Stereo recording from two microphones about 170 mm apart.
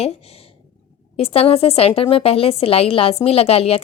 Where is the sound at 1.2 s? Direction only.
35° left (ahead or behind).